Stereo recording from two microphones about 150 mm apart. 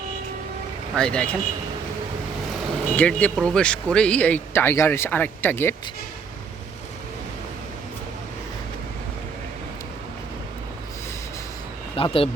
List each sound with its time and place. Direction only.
0.9 s speech: 5° left (ahead or behind)
2.9 s speech: 10° left (ahead or behind)
11.9 s speech: 40° left (ahead or behind)